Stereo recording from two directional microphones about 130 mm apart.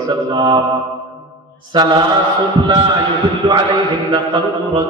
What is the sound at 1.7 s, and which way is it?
Speech, 35° right (ahead or behind).